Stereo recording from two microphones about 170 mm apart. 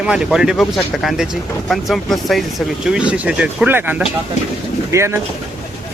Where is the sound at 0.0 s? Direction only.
5° right (ahead or behind).